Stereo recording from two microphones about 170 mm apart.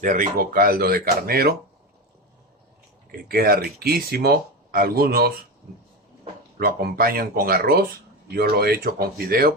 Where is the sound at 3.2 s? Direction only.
60° right (ahead or behind).